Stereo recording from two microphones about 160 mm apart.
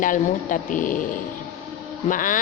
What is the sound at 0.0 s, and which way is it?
A woman's voice, 55° left (ahead or behind).